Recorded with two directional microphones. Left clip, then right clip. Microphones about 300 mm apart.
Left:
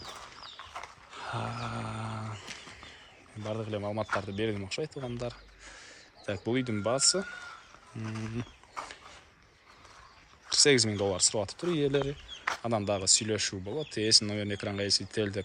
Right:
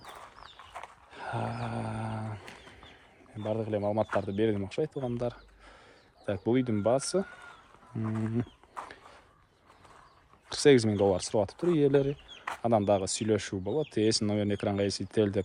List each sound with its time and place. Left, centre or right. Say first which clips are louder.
0.7 s a sound: left 2 dB; centre
3.4 s speech: right 4 dB; centre
7.9 s wild animals: right 5 dB; centre
10.5 s speech: right 1 dB; centre